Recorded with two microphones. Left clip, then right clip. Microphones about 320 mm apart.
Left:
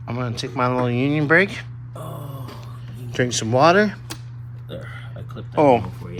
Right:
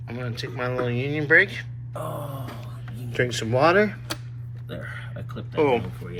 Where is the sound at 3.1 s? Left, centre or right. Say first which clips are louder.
Left 4 dB; centre.